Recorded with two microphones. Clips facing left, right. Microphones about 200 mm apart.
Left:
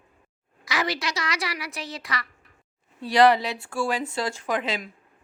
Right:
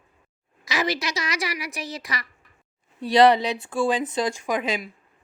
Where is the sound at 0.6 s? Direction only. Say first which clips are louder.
Right 2 dB; 20° right (ahead or behind).